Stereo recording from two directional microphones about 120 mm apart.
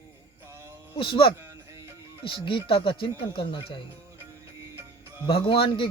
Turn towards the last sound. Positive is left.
turn(degrees=50)  # may be behind; listen again after turning